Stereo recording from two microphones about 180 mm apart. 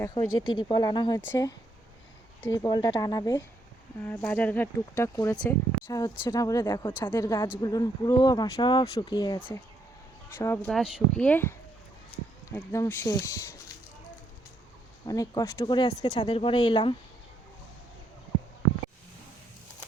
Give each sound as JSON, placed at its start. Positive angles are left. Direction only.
{"t": 0.0, "sound": "speech", "side_deg": 25}
{"t": 2.6, "sound": "speech", "side_deg": 20}
{"t": 10.7, "sound": "speech", "side_deg": 0}
{"t": 15.0, "sound": "speech", "side_deg": 20}